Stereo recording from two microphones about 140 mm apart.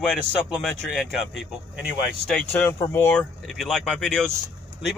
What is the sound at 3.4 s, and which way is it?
Speech, 5° left (ahead or behind).